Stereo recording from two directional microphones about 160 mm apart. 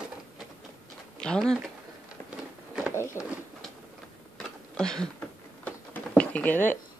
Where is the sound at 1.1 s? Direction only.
5° left (ahead or behind).